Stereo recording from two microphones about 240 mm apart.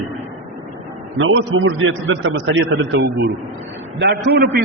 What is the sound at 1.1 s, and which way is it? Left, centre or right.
A man's voice, right.